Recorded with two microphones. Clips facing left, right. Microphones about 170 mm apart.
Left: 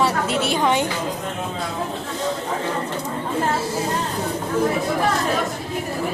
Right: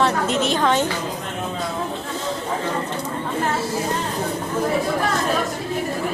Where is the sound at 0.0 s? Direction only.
10° left (ahead or behind).